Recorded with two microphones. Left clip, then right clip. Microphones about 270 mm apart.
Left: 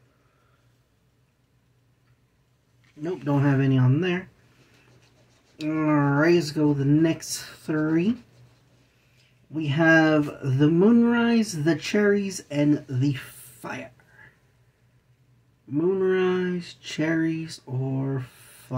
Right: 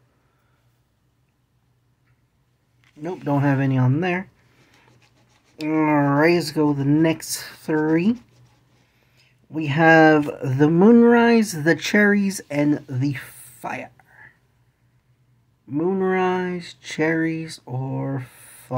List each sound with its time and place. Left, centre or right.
3.0 s speech: right
5.7 s speech: right
9.5 s speech: right
15.7 s speech: right